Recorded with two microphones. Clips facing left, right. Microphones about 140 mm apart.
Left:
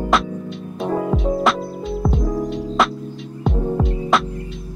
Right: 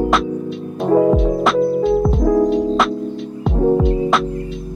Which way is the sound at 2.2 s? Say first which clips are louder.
Right 9 dB; 70° right (ahead or behind).